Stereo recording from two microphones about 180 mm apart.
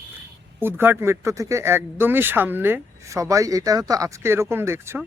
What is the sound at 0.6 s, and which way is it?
Speech, 10° right (ahead or behind).